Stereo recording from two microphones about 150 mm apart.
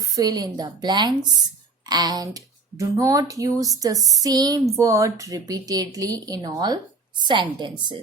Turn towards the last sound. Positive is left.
turn(degrees=-30)  # may be behind; listen again after turning